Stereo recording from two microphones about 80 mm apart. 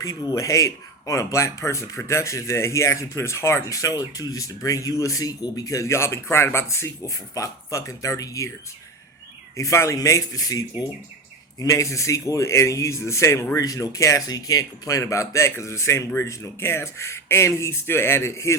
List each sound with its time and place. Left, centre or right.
0.0 s speech: left
9.6 s speech: left